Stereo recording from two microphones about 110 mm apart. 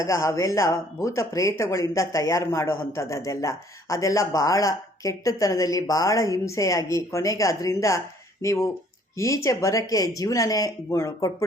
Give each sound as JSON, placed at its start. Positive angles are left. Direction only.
{"t": 0.0, "sound": "speech", "side_deg": 25}